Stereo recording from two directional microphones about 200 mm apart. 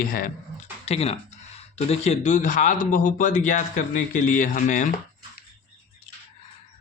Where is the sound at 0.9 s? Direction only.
30° left (ahead or behind).